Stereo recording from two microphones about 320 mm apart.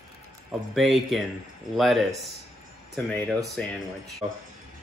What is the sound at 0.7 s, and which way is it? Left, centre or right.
Speech, centre.